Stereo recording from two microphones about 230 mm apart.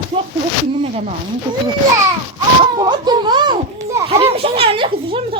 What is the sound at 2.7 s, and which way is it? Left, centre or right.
A child's voice, centre.